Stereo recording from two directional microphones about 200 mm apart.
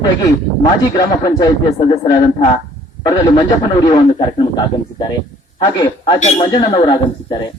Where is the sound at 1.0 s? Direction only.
20° left (ahead or behind).